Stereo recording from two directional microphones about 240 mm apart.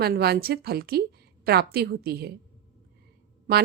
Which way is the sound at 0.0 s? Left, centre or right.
Right.